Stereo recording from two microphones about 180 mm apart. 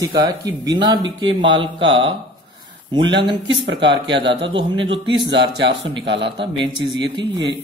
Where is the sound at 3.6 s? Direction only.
80° right.